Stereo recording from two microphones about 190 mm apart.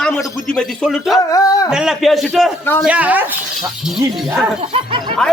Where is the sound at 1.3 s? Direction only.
20° left (ahead or behind).